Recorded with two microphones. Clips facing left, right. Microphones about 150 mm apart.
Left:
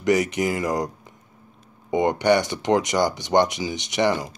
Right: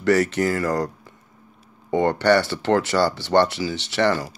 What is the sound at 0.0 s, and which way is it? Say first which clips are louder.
Speech: right 2 dB; 15° left (ahead or behind).